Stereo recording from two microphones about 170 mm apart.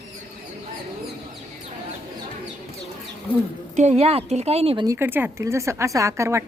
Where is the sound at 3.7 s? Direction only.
40° right (ahead or behind).